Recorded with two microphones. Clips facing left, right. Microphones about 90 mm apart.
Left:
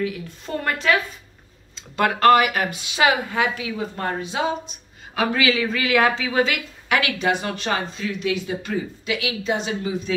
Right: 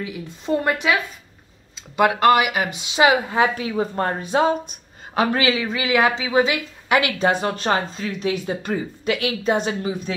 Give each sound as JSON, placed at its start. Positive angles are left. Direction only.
{"t": 0.0, "sound": "speech", "side_deg": -15}
{"t": 2.7, "sound": "speech", "side_deg": -25}
{"t": 3.3, "sound": "speech", "side_deg": -35}
{"t": 5.6, "sound": "speech", "side_deg": -20}